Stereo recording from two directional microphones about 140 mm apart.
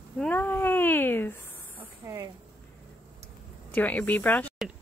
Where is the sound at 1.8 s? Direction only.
20° right (ahead or behind).